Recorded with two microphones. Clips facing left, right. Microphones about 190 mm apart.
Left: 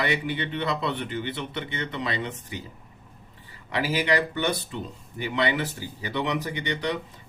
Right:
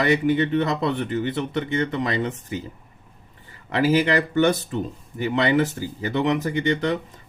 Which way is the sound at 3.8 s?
45° right (ahead or behind).